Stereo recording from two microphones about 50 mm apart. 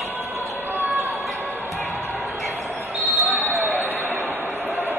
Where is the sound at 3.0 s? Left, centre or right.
Right.